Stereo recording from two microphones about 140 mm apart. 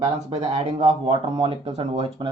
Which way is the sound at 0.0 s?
50° right (ahead or behind).